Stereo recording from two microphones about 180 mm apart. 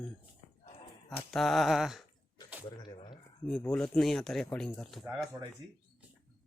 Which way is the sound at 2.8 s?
25° left (ahead or behind).